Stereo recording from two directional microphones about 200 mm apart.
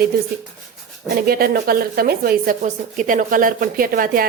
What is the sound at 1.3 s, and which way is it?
A woman's voice, 50° right (ahead or behind).